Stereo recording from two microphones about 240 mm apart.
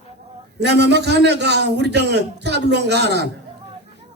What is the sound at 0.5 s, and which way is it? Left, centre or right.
A man's voice, right.